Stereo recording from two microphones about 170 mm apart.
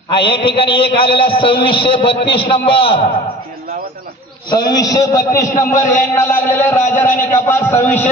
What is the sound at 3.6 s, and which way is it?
Bird, 60° right (ahead or behind).